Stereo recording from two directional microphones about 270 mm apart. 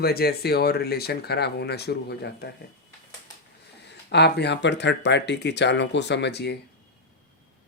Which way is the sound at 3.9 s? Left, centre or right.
Left.